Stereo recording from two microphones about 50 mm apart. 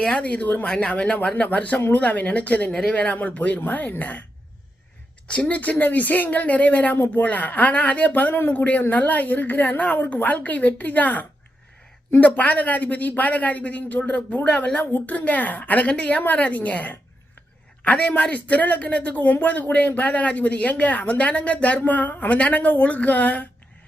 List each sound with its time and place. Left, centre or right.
0.0 s speech: left
5.3 s speech: left
19.2 s speech: left